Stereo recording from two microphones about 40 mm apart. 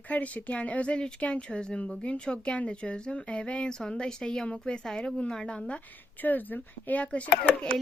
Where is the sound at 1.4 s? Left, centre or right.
Left.